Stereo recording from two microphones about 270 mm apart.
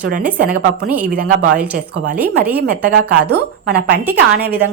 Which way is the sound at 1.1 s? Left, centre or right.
Right.